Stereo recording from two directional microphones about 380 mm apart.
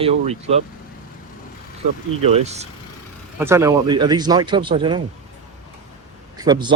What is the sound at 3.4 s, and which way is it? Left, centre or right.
Speech, centre.